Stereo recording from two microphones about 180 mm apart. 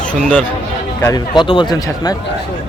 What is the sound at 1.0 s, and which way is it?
Speech, 20° left (ahead or behind).